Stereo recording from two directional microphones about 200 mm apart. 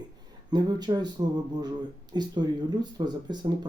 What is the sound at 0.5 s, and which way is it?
Speech, 20° right (ahead or behind).